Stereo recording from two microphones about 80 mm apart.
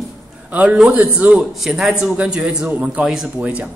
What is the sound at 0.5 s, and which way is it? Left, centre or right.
Speech, centre.